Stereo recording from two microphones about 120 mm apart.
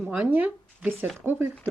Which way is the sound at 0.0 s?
10° right (ahead or behind).